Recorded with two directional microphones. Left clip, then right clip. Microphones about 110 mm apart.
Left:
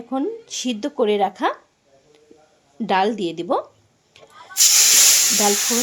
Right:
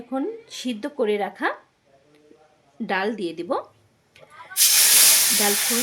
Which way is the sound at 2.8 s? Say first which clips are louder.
Left 6 dB; 50° left (ahead or behind).